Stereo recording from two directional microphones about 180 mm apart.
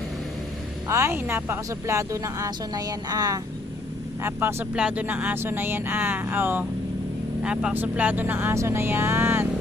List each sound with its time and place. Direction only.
0.9 s a woman's voice: 15° right (ahead or behind)